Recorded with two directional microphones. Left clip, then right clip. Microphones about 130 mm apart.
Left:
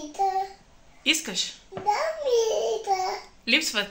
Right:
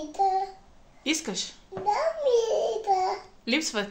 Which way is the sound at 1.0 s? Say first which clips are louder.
Left 4 dB; 45° right (ahead or behind).